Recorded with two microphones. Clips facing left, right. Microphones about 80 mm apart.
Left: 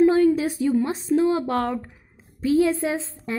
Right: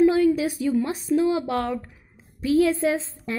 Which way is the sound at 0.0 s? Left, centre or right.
Left.